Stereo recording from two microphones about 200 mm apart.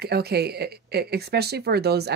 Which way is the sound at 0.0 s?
55° right (ahead or behind).